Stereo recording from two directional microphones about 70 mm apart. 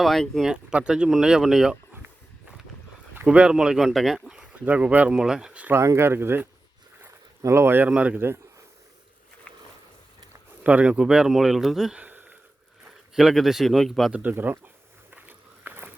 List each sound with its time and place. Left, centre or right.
0.0 s speech: centre
0.4 s speech: centre
3.2 s speech: centre
5.1 s speech: centre
5.7 s speech: right
7.9 s speech: centre
9.5 s a sound: centre
10.6 s speech: centre
11.9 s a sound: right
13.1 s speech: centre
14.1 s speech: right
15.1 s walk: right